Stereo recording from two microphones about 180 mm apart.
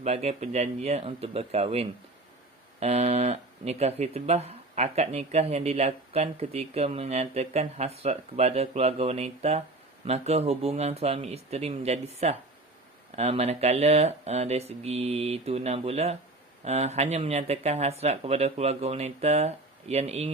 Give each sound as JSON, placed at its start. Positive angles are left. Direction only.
{"t": 0.0, "sound": "speech", "side_deg": -35}